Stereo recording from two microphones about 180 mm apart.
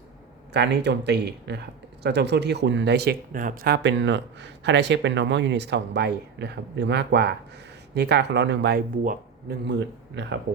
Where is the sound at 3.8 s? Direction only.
80° right; by 9.6 s 55° right (ahead or behind).